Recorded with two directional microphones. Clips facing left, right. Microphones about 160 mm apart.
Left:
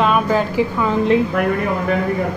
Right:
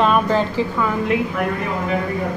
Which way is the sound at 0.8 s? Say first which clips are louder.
Left 4 dB; 25° left (ahead or behind).